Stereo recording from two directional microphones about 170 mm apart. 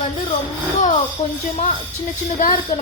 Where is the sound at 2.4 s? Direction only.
55° left (ahead or behind).